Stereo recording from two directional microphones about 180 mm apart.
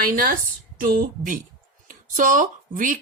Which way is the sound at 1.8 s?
50° right (ahead or behind).